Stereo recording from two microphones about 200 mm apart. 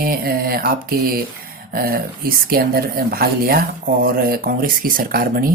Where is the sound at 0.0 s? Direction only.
50° right (ahead or behind).